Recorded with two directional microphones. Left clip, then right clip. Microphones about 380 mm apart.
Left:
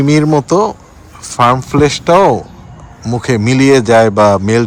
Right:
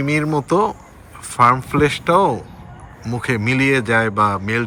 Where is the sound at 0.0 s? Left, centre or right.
Centre.